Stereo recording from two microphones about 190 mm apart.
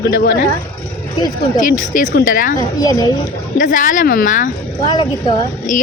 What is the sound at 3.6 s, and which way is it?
Speech, 45° left (ahead or behind).